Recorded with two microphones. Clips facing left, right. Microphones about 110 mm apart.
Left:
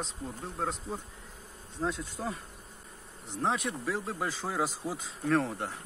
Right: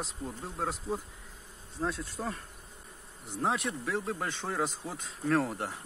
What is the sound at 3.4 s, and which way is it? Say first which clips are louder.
Speech: even; centre (ahead or behind).